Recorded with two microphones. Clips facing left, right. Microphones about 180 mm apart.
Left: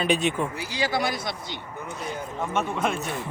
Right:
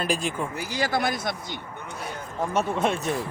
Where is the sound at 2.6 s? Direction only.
35° right (ahead or behind).